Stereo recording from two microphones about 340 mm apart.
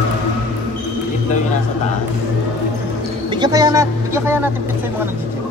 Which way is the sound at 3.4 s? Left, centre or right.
Centre.